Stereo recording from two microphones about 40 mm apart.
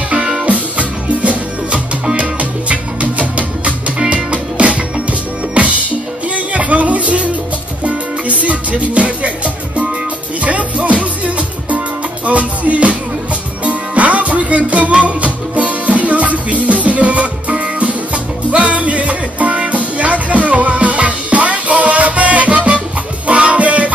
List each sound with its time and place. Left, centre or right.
0.5 s music: right